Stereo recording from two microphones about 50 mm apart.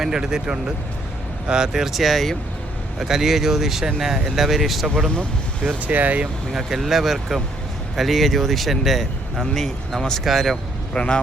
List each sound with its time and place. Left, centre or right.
0.0 s speech: centre
5.6 s speech: right
6.5 s speech: centre
9.6 s speech: centre
10.9 s a man's voice: left